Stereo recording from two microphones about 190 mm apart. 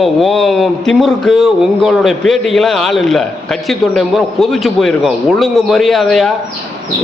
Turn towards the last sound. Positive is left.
turn(degrees=0)  # may be behind; listen again after turning